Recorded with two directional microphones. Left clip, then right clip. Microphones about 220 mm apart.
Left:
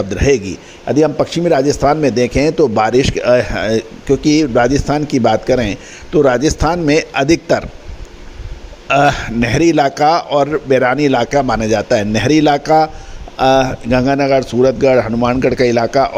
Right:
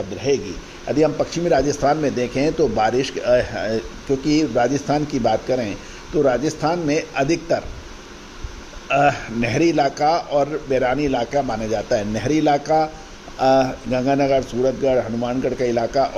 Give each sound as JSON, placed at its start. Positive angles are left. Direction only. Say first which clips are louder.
{"t": 0.1, "sound": "a man's voice", "louder": "left 6 dB", "side_deg": 40}
{"t": 8.9, "sound": "a man's voice", "louder": "left 5 dB", "side_deg": 40}